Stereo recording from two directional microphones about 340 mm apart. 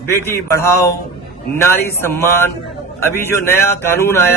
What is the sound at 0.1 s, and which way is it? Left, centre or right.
A man's voice, centre.